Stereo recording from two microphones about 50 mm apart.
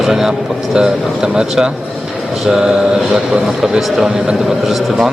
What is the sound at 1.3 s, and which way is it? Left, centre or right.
A man's voice, centre.